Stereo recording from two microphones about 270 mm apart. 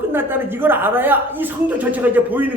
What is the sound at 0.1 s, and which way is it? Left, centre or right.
Speech, centre.